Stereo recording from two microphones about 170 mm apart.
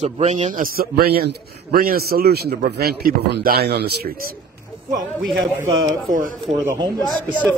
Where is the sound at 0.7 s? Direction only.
65° right (ahead or behind).